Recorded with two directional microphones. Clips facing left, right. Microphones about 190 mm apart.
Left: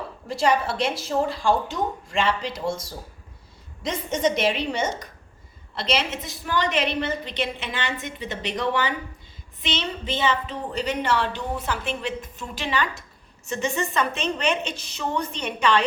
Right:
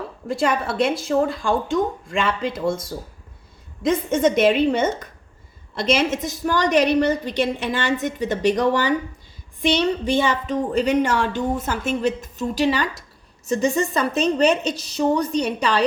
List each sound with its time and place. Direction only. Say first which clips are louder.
0.3 s a woman's voice: even; 55° right (ahead or behind)
3.8 s a woman's voice: right 6 dB; 50° right (ahead or behind)